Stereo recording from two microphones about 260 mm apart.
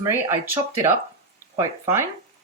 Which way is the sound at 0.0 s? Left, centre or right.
Centre.